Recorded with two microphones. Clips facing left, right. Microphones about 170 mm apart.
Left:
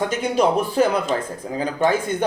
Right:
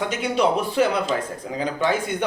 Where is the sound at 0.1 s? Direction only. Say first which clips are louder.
Left 2 dB; 45° left (ahead or behind).